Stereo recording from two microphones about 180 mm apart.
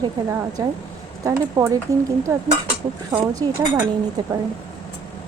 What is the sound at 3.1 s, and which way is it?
Speech, 20° right (ahead or behind).